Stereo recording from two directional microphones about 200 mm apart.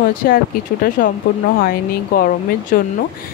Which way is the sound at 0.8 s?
45° left (ahead or behind).